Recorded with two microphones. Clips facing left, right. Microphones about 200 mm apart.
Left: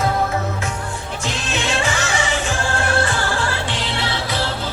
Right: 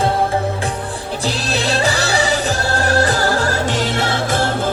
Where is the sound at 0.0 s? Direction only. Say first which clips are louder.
Right 3 dB; 30° right (ahead or behind).